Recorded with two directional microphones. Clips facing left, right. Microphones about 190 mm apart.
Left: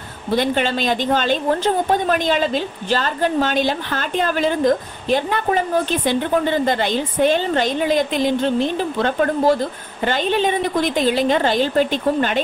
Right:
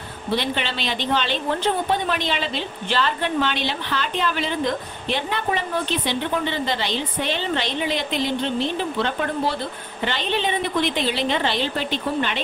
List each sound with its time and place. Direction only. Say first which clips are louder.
0.3 s a woman's voice: left 6 dB; 45° left (ahead or behind)